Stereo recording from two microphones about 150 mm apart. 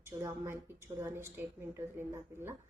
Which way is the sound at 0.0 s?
20° right (ahead or behind).